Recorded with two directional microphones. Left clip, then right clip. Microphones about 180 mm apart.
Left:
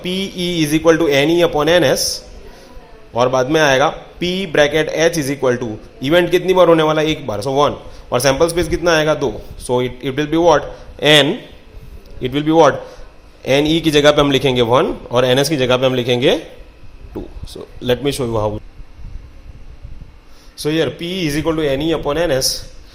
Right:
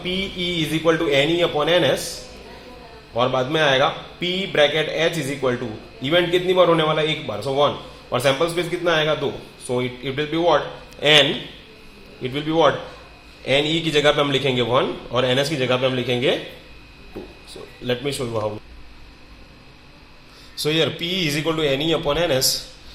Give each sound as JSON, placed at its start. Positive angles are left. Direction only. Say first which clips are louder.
{"t": 0.0, "sound": "a man's voice", "louder": "left 3 dB", "side_deg": 55}
{"t": 3.2, "sound": "a man's voice", "louder": "left 6 dB", "side_deg": 60}
{"t": 17.8, "sound": "a man's voice", "louder": "left 7 dB", "side_deg": 65}
{"t": 20.6, "sound": "speech", "louder": "left 3 dB", "side_deg": 45}